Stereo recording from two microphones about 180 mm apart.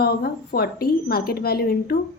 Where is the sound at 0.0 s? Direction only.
60° left (ahead or behind).